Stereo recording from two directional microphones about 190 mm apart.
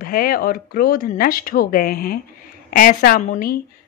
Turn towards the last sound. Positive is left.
turn(degrees=45)  # may be behind; listen again after turning